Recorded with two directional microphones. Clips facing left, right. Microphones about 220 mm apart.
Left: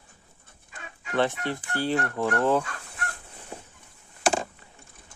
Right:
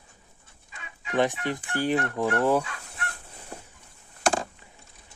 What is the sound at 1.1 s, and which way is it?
Speech, 15° right (ahead or behind).